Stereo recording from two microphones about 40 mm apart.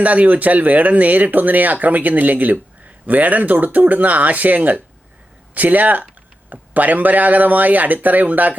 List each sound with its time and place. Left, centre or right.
0.0 s speech: right